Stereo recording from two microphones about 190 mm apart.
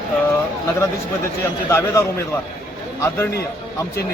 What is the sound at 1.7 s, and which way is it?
Speech, 15° left (ahead or behind).